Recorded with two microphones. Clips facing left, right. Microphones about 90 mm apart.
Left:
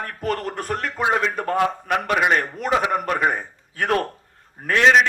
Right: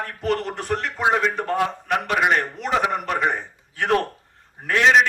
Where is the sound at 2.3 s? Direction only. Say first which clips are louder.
Left 1 dB; 45° left (ahead or behind).